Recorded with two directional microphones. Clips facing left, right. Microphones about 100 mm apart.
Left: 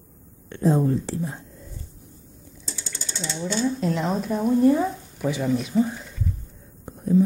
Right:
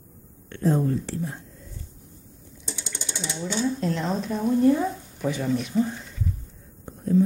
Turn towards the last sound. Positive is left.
turn(degrees=10)  # may be behind; listen again after turning